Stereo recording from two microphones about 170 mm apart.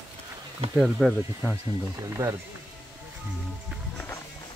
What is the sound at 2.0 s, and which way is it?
Speech, 20° right (ahead or behind).